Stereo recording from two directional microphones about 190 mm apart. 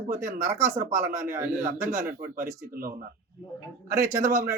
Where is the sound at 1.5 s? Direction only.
40° right (ahead or behind).